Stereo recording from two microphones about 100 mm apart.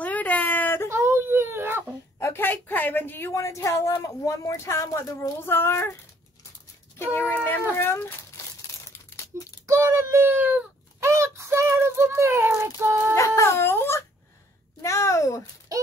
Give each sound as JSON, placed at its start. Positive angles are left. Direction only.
{"t": 0.0, "sound": "a sound", "side_deg": 15}
{"t": 0.8, "sound": "whimper", "side_deg": -25}
{"t": 2.1, "sound": "a woman's voice", "side_deg": 25}
{"t": 7.7, "sound": "crumpling", "side_deg": 25}
{"t": 9.7, "sound": "speech", "side_deg": -25}
{"t": 13.1, "sound": "a woman's voice", "side_deg": 30}